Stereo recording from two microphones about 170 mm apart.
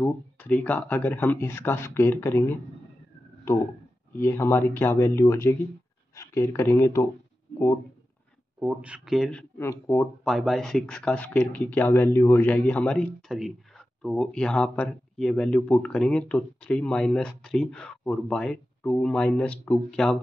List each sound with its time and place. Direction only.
0.0 s speech: 10° left (ahead or behind)
4.2 s speech: 15° left (ahead or behind)
8.5 s speech: 5° right (ahead or behind); by 10.0 s 15° left (ahead or behind)
10.2 s speech: centre (ahead or behind)